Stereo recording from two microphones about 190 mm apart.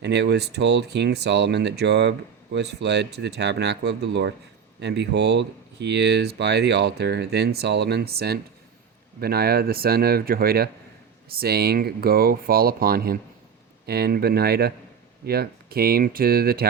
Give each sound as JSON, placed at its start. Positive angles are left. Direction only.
{"t": 0.0, "sound": "speech", "side_deg": -60}